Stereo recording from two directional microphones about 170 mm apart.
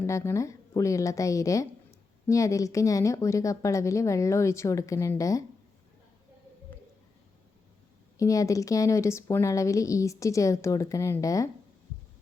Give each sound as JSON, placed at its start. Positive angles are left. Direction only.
{"t": 0.1, "sound": "a woman's voice", "side_deg": 15}
{"t": 8.2, "sound": "a woman's voice", "side_deg": 20}